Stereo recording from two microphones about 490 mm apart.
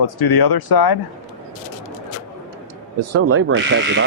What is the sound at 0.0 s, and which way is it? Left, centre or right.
Speech, left.